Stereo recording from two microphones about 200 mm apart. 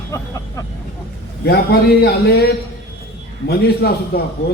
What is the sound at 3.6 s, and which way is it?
Speech, 50° left (ahead or behind).